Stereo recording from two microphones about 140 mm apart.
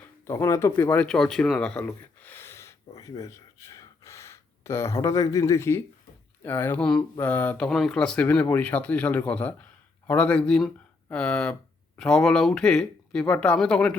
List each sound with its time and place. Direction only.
0.0 s speech: 20° left (ahead or behind)